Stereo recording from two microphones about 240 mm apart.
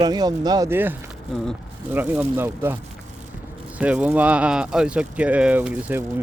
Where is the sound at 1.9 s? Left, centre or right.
Centre.